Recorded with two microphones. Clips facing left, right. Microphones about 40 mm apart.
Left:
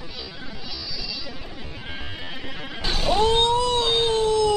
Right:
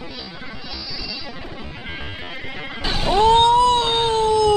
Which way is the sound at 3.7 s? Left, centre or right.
Right.